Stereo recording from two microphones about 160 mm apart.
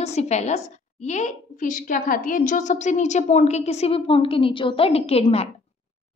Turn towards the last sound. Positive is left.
turn(degrees=40)  # may be behind; listen again after turning